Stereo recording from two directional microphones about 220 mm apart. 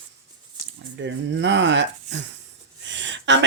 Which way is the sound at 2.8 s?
55° right (ahead or behind).